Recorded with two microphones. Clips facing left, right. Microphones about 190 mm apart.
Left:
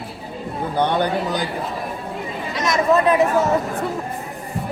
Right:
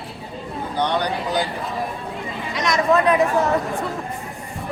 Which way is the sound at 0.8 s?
50° left (ahead or behind).